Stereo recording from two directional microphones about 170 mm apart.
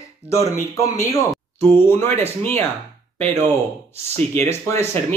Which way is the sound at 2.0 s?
40° right (ahead or behind).